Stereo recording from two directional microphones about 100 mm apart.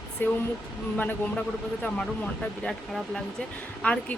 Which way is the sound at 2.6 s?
5° left (ahead or behind).